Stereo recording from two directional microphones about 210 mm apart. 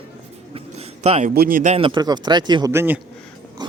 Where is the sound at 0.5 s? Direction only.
30° right (ahead or behind).